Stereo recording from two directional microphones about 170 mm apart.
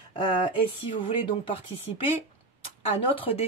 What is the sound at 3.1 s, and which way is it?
Speech, 35° left (ahead or behind).